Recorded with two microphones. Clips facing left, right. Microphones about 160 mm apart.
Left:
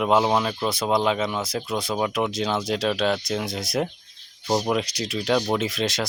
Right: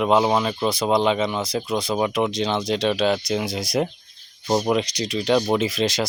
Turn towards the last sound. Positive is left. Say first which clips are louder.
# right 3 dB
turn(degrees=0)  # may be behind; listen again after turning